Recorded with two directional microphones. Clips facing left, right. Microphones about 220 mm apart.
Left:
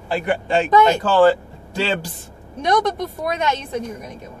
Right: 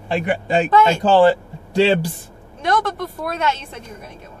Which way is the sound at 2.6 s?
20° left (ahead or behind).